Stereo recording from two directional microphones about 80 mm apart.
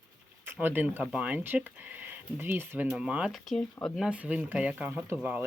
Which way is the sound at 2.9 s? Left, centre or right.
Centre.